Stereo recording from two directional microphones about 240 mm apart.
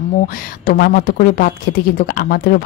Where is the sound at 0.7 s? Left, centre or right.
Left.